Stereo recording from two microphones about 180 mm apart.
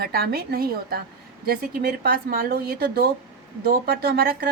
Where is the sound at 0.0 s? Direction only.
60° right (ahead or behind).